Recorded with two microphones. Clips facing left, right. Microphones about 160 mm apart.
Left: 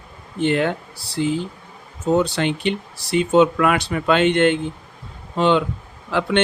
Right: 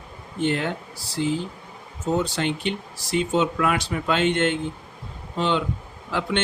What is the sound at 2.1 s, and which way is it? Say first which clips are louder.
Speech: left 5 dB; 65° left (ahead or behind).